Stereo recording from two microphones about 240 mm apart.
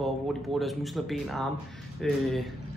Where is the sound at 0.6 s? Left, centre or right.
Centre.